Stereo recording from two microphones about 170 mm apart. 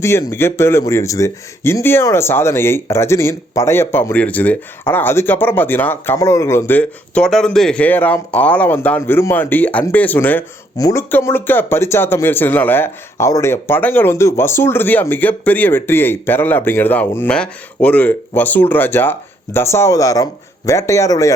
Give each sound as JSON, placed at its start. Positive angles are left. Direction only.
{"t": 0.0, "sound": "speech", "side_deg": 15}